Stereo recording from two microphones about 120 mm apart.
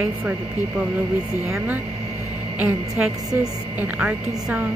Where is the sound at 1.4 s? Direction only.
20° right (ahead or behind).